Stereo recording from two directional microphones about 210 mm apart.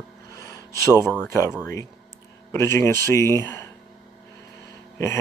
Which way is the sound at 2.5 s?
15° left (ahead or behind).